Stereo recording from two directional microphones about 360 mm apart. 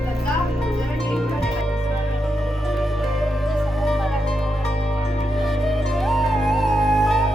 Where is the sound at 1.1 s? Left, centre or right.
Centre.